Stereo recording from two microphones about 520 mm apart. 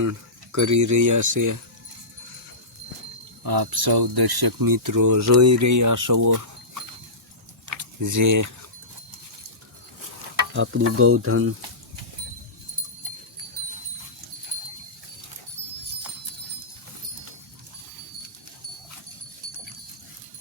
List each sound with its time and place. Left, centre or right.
0.0 s speech: right
3.4 s speech: right
8.0 s speech: right
10.5 s stir: right